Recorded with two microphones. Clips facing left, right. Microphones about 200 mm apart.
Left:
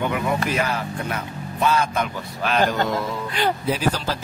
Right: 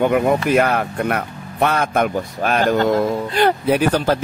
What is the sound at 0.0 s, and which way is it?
Speech, 50° right (ahead or behind).